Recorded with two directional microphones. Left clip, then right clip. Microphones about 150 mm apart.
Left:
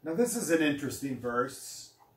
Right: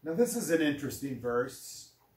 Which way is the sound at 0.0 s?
30° right (ahead or behind).